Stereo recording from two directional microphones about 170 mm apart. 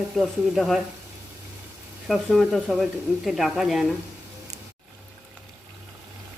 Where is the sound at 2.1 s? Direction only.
Centre (ahead or behind).